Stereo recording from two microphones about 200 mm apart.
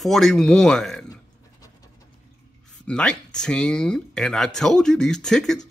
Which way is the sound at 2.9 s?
5° left (ahead or behind).